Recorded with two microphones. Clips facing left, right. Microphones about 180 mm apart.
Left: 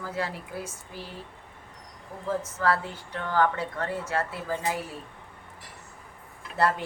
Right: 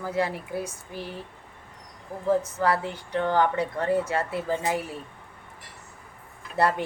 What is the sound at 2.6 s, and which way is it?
A woman's voice, 15° right (ahead or behind).